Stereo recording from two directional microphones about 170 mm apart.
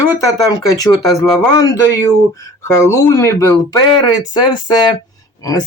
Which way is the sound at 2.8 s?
15° left (ahead or behind).